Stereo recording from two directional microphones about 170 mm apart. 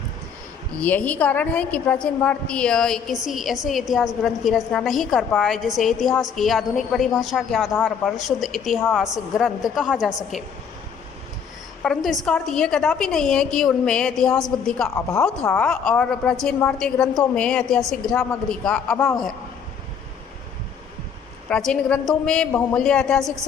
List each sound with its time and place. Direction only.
0.8 s a woman's voice: 10° left (ahead or behind)
11.8 s a woman's voice: centre (ahead or behind)
14.8 s speech: 15° left (ahead or behind)
15.2 s a woman's voice: 5° left (ahead or behind)
21.5 s a woman's voice: 5° left (ahead or behind)